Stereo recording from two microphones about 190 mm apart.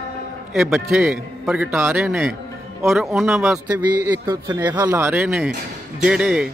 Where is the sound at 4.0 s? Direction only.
20° right (ahead or behind); by 6.5 s 5° right (ahead or behind).